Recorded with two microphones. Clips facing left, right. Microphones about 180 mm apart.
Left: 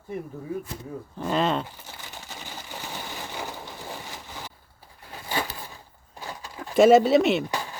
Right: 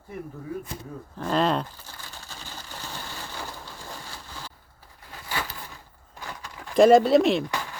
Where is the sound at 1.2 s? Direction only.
5° left (ahead or behind).